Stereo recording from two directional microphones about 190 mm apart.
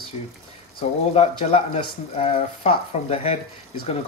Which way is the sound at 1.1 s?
35° left (ahead or behind).